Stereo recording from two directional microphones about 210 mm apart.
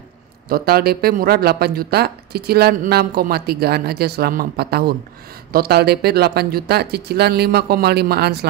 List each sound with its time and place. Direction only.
0.5 s speech: 45° right (ahead or behind)